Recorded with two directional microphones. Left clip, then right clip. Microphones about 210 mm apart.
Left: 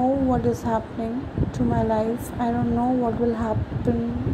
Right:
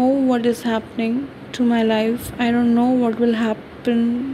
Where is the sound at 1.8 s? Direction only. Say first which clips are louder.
Right 3 dB; 15° right (ahead or behind).